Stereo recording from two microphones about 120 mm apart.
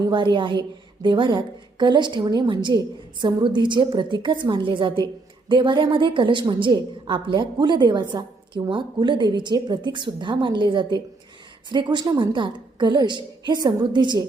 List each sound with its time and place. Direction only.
0.0 s a woman's voice: 40° right (ahead or behind)